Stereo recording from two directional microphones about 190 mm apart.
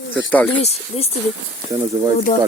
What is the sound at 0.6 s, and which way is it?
Speech, 35° left (ahead or behind).